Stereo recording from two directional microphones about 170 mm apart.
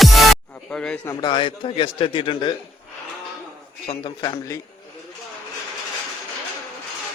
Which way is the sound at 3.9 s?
25° left (ahead or behind).